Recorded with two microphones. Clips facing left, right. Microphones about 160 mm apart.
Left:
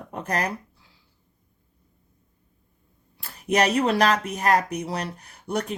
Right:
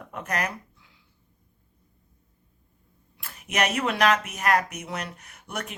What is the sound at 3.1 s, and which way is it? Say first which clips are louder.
Speech: left 6 dB; 35° left (ahead or behind).